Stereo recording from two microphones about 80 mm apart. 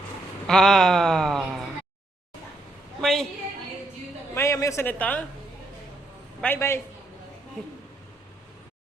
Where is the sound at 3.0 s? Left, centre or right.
Centre.